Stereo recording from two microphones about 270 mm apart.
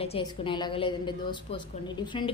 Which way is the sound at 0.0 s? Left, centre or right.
Centre.